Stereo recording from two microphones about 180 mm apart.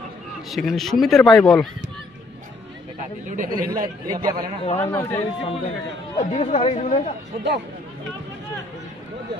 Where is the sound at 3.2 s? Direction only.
45° right (ahead or behind).